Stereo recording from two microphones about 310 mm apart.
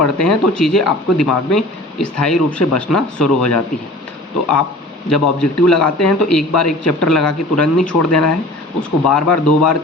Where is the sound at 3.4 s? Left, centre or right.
Left.